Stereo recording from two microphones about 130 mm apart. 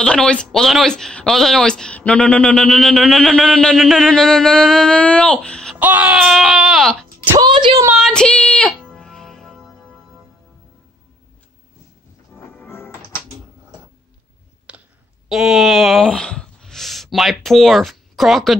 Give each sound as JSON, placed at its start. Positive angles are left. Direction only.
{"t": 0.0, "sound": "speech", "side_deg": 5}
{"t": 5.8, "sound": "speech", "side_deg": -10}
{"t": 7.3, "sound": "a woman's voice", "side_deg": -35}
{"t": 7.9, "sound": "music", "side_deg": 5}
{"t": 12.6, "sound": "music", "side_deg": 20}
{"t": 14.7, "sound": "clicking", "side_deg": -10}
{"t": 15.2, "sound": "speech", "side_deg": -5}